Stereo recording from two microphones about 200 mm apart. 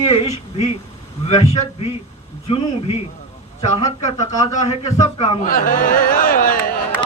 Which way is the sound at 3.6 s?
30° left (ahead or behind).